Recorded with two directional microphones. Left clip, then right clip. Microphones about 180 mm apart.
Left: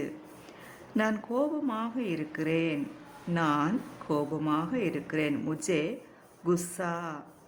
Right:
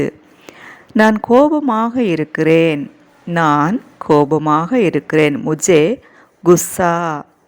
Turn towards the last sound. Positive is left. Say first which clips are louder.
# right 19 dB
turn(degrees=-50)  # may be behind; listen again after turning